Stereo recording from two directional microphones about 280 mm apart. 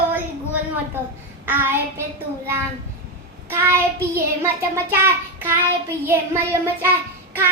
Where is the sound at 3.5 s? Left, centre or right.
Centre.